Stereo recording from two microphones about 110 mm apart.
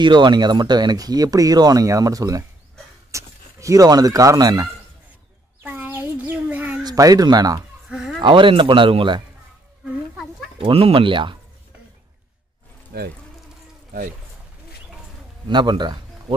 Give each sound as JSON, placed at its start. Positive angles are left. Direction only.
{"t": 0.0, "sound": "speech", "side_deg": -45}
{"t": 5.6, "sound": "a sound", "side_deg": -15}
{"t": 6.8, "sound": "speech", "side_deg": -35}
{"t": 7.9, "sound": "a sound", "side_deg": -5}
{"t": 8.2, "sound": "speech", "side_deg": -50}
{"t": 10.6, "sound": "speech", "side_deg": -60}
{"t": 15.4, "sound": "speech", "side_deg": -40}